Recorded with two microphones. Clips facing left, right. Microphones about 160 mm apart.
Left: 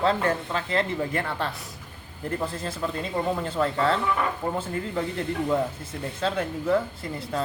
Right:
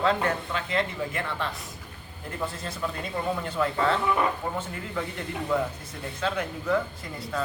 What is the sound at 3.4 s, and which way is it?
Speech, 30° left (ahead or behind).